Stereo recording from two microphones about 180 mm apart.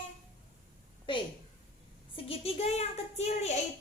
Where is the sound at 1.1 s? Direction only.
25° left (ahead or behind).